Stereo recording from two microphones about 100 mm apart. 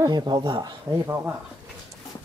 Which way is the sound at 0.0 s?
45° right (ahead or behind).